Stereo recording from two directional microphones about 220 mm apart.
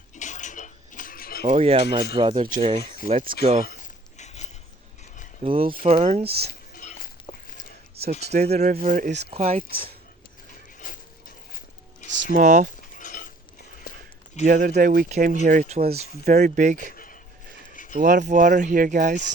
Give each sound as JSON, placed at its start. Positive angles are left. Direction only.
{"t": 0.2, "sound": "dishes", "side_deg": 35}
{"t": 1.5, "sound": "speech", "side_deg": -30}
{"t": 4.2, "sound": "a sound", "side_deg": 30}
{"t": 5.4, "sound": "speech", "side_deg": -25}
{"t": 6.5, "sound": "dishes", "side_deg": 40}
{"t": 8.3, "sound": "speech", "side_deg": -30}
{"t": 10.8, "sound": "a sound", "side_deg": 40}
{"t": 12.0, "sound": "a sound", "side_deg": -55}
{"t": 12.3, "sound": "speech", "side_deg": -35}
{"t": 13.0, "sound": "mechanisms", "side_deg": 35}
{"t": 14.4, "sound": "speech", "side_deg": -40}
{"t": 16.9, "sound": "a sound", "side_deg": 40}
{"t": 18.0, "sound": "speech", "side_deg": -35}